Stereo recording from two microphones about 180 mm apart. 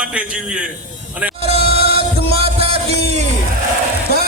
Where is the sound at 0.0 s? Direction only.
5° right (ahead or behind).